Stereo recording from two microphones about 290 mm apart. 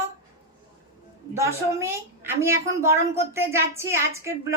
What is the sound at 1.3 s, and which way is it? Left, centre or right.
A woman's voice, centre.